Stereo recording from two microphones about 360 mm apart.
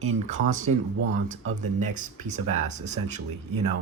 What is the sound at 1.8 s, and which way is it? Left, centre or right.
Speech, centre.